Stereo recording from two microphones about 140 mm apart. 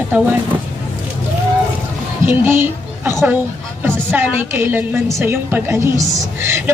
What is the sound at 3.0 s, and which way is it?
A woman's voice, 15° right (ahead or behind).